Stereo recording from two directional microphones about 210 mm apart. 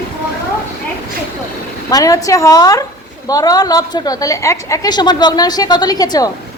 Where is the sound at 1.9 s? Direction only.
15° left (ahead or behind).